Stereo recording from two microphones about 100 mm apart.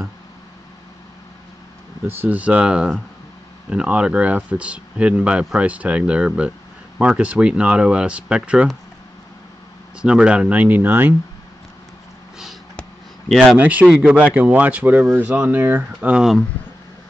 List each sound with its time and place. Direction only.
2.0 s speech: 20° right (ahead or behind)
10.0 s speech: 10° right (ahead or behind)
13.6 s speech: 15° right (ahead or behind)
16.1 s speech: 5° right (ahead or behind)